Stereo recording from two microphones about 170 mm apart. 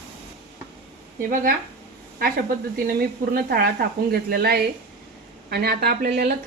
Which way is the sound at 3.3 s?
65° right (ahead or behind).